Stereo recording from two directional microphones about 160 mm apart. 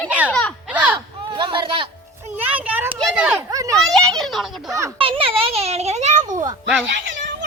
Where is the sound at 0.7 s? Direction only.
10° right (ahead or behind).